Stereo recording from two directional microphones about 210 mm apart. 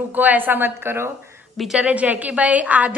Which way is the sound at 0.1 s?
10° right (ahead or behind).